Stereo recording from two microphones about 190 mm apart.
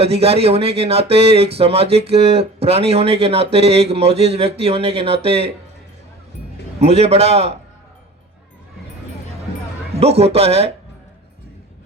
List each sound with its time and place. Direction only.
0.0 s speech: 30° right (ahead or behind)
6.7 s speech: 35° right (ahead or behind)
9.9 s speech: 35° right (ahead or behind)